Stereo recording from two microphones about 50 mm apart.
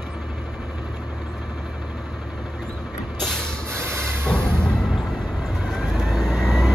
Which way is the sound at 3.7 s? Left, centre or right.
Right.